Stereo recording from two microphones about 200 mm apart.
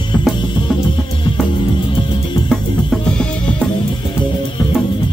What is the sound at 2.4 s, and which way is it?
Music, 5° left (ahead or behind).